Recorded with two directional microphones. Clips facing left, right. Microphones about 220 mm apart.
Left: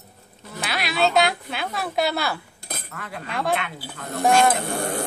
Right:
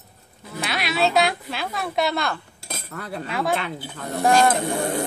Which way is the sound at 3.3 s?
Centre (ahead or behind).